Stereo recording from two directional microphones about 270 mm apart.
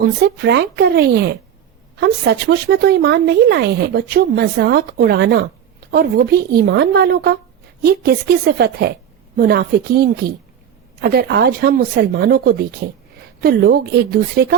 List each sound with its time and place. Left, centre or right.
0.4 s speech: right